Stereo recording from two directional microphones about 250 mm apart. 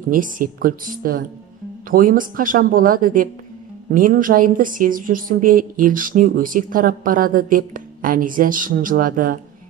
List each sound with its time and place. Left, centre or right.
0.1 s a woman's voice: right